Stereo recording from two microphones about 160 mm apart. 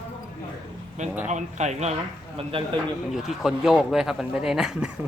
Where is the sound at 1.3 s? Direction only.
45° right (ahead or behind).